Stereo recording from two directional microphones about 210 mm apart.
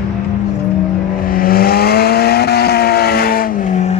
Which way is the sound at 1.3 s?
45° left (ahead or behind).